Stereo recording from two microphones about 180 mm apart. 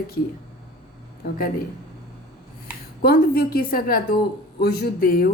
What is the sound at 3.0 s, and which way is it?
Speech, 60° left (ahead or behind).